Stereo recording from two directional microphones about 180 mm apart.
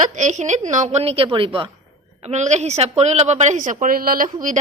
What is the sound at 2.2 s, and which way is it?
A woman's voice, 40° right (ahead or behind).